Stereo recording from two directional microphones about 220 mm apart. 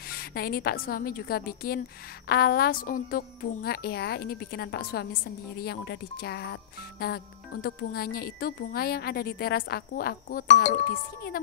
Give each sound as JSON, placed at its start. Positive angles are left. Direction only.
{"t": 0.1, "sound": "a woman's voice", "side_deg": 45}